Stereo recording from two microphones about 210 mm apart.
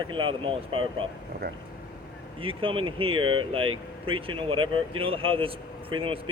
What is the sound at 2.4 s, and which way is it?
Speech, 25° right (ahead or behind).